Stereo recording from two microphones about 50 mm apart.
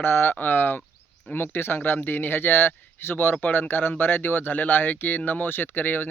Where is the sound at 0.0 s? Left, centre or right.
Left.